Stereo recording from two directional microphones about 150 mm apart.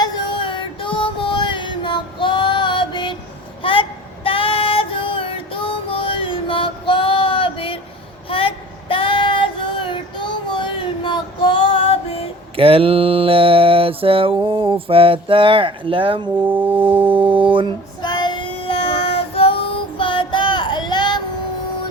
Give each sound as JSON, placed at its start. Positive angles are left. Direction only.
{"t": 0.0, "sound": "music", "side_deg": 35}
{"t": 3.6, "sound": "child singing", "side_deg": 35}
{"t": 12.5, "sound": "mantra", "side_deg": -40}
{"t": 14.4, "sound": "a sound", "side_deg": -35}
{"t": 16.3, "sound": "music", "side_deg": -10}
{"t": 17.1, "sound": "music", "side_deg": -35}
{"t": 18.0, "sound": "child singing", "side_deg": 30}